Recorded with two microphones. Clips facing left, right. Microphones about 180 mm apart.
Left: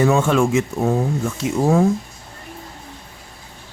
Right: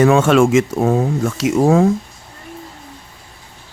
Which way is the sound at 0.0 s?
90° right.